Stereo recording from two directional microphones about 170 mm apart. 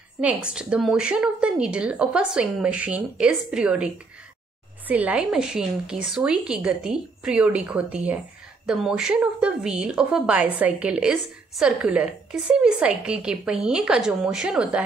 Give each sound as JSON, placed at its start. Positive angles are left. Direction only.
{"t": 0.2, "sound": "a woman's voice", "side_deg": -5}